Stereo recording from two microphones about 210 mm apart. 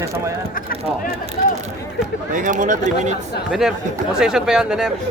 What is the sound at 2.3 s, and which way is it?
Speech, 40° right (ahead or behind).